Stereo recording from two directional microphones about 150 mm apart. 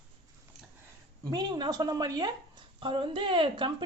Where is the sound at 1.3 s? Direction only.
30° right (ahead or behind).